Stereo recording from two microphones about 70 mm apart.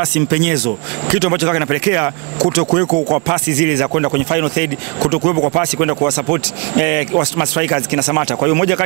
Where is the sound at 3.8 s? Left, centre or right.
Right.